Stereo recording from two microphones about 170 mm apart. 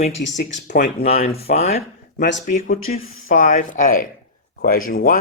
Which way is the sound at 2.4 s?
55° left (ahead or behind).